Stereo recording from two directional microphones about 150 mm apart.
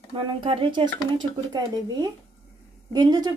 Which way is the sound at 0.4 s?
35° right (ahead or behind).